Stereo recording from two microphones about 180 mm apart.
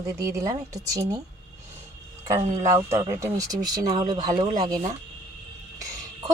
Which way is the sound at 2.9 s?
15° right (ahead or behind).